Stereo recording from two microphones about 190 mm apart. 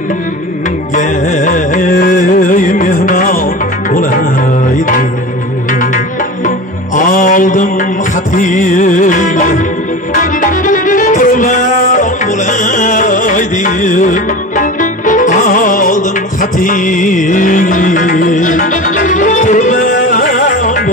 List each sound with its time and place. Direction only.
0.9 s music: 45° left (ahead or behind)
7.0 s music: 45° left (ahead or behind)